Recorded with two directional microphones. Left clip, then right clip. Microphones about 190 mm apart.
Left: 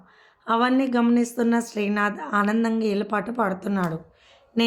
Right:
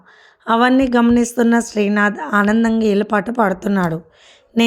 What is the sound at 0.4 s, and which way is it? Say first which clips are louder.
A woman's voice: right 7 dB; 35° right (ahead or behind).